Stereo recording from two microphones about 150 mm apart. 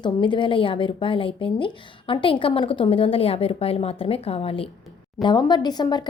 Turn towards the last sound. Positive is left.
turn(degrees=30)  # may be behind; listen again after turning